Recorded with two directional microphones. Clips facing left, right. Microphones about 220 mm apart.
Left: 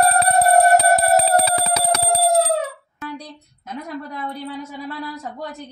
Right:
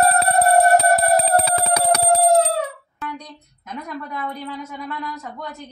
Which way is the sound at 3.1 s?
30° left (ahead or behind).